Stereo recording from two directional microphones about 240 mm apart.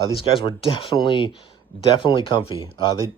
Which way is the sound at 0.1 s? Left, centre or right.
Left.